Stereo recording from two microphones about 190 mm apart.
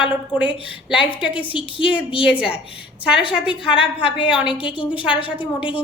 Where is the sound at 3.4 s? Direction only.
30° left (ahead or behind).